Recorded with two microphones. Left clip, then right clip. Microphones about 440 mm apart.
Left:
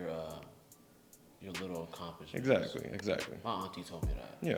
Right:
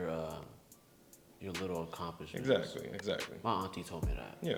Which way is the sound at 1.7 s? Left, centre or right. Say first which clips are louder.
Right 3 dB; right.